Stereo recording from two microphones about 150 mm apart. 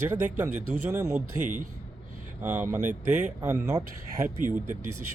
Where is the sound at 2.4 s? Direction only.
10° right (ahead or behind).